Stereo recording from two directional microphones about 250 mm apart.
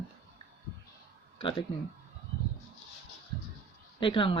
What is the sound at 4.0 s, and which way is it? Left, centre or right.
Speech, left.